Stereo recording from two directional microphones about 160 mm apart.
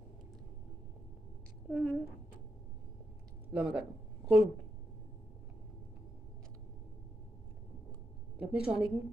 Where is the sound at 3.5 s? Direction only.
10° right (ahead or behind).